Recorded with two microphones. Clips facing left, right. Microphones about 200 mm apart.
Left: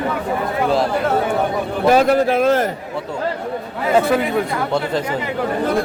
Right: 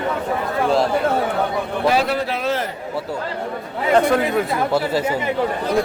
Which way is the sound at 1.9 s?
45° left (ahead or behind).